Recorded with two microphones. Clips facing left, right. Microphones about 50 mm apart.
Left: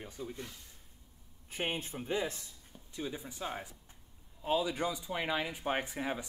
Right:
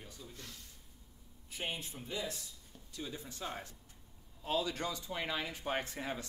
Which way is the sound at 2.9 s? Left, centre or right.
Centre.